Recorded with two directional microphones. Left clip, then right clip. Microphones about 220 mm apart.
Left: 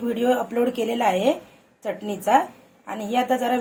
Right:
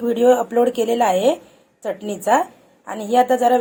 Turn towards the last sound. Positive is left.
turn(degrees=-35)  # may be behind; listen again after turning